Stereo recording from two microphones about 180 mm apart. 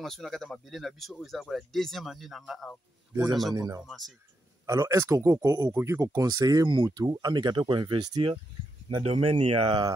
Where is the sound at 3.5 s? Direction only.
20° right (ahead or behind).